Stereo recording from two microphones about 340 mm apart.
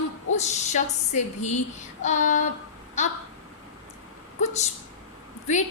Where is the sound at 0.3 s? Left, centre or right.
Centre.